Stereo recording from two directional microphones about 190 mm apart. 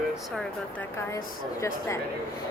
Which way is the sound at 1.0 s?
15° left (ahead or behind).